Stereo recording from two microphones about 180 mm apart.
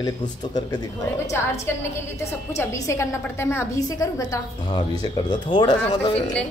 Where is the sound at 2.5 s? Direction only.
15° left (ahead or behind).